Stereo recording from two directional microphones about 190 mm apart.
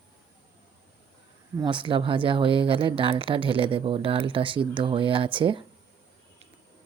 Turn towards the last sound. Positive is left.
turn(degrees=-25)  # may be behind; listen again after turning